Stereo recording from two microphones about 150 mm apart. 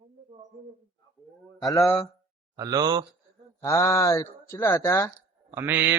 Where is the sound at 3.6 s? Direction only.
20° left (ahead or behind).